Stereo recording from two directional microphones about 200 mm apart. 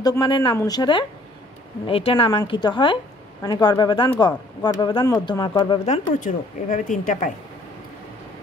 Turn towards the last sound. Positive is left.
turn(degrees=40)  # may be behind; listen again after turning